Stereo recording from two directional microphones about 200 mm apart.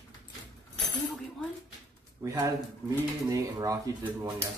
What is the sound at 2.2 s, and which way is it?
Speech, 15° right (ahead or behind).